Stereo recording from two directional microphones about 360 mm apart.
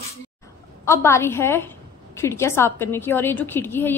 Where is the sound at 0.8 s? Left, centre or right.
Centre.